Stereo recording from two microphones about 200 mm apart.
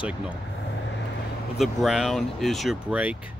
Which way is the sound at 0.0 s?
5° right (ahead or behind).